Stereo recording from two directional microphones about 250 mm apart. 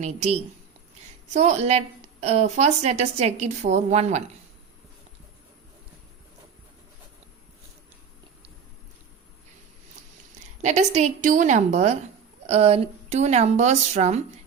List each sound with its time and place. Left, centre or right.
0.0 s a woman's voice: right
10.6 s a woman's voice: right